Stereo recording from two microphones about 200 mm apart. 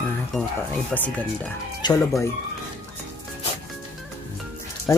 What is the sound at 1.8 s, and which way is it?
Speech, 20° left (ahead or behind).